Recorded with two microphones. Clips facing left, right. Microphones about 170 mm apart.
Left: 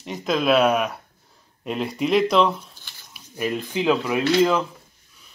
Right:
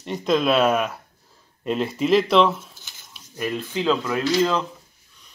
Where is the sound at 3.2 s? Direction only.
15° left (ahead or behind).